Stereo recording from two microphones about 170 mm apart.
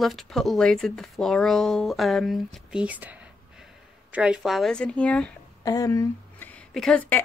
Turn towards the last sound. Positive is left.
turn(degrees=10)  # may be behind; listen again after turning